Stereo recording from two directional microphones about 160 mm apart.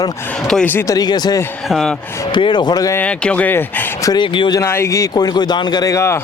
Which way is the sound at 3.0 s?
10° left (ahead or behind).